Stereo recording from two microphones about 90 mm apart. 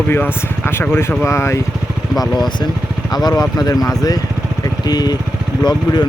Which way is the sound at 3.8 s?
45° left (ahead or behind).